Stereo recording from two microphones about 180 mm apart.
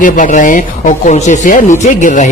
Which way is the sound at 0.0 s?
45° left (ahead or behind).